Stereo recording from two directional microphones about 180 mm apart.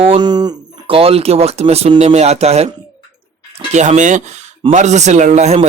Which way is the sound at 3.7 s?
40° right (ahead or behind).